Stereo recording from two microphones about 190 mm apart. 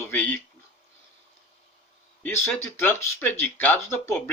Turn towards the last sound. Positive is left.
turn(degrees=10)  # may be behind; listen again after turning